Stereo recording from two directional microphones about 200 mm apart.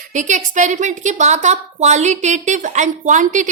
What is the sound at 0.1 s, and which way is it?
A woman's voice, 40° right (ahead or behind).